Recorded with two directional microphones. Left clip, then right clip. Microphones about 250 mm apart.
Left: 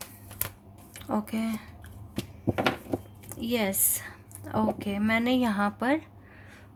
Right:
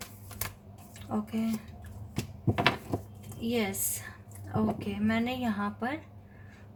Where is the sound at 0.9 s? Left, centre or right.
Left.